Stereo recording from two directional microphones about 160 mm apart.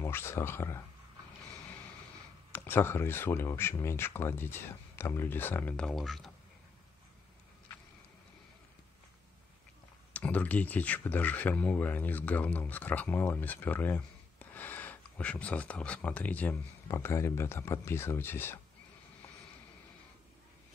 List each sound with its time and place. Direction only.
0.0 s speech: 15° left (ahead or behind)
2.5 s speech: 15° left (ahead or behind)
10.1 s speech: 10° left (ahead or behind)